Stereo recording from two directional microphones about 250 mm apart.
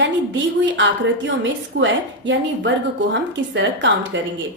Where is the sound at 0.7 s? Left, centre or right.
Right.